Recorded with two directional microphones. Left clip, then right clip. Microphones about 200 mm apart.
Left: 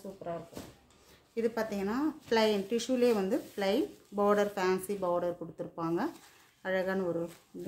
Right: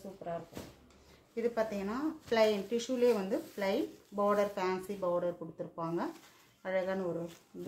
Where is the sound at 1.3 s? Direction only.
45° left (ahead or behind).